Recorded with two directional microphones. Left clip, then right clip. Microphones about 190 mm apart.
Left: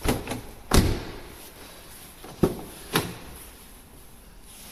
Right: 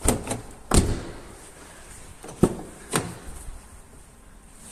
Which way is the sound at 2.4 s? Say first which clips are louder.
Right 2 dB; 60° right (ahead or behind).